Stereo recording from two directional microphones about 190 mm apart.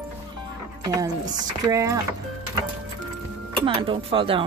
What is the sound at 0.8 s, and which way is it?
Chopping, 20° right (ahead or behind).